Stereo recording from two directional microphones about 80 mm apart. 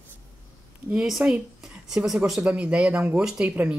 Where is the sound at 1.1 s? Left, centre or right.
Centre.